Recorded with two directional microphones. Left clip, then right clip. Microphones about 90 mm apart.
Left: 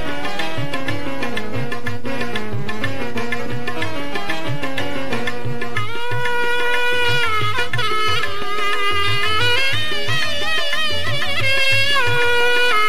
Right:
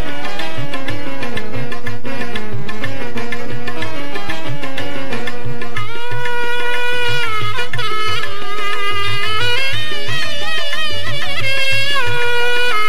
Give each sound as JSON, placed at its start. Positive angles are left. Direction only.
{"t": 6.2, "sound": "music", "side_deg": 40}